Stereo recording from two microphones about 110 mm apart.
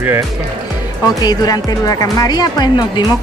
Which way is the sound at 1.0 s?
35° left (ahead or behind).